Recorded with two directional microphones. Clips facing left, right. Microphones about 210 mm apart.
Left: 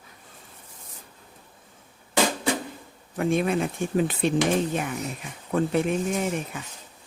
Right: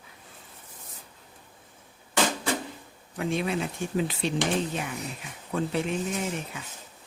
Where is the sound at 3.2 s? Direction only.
50° left (ahead or behind).